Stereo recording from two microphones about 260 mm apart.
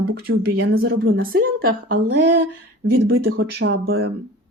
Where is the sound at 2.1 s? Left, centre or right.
Right.